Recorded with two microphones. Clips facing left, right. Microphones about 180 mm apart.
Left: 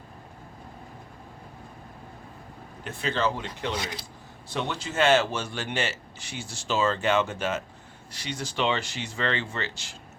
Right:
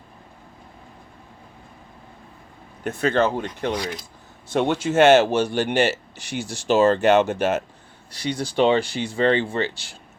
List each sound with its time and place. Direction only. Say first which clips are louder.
2.8 s speech: right 7 dB; 50° right (ahead or behind)
3.8 s speech: right 5 dB; 25° left (ahead or behind)
4.5 s speech: right 10 dB; 50° right (ahead or behind)
4.9 s speech: right 8 dB; 75° right (ahead or behind)
8.1 s speech: right 9 dB; 35° right (ahead or behind)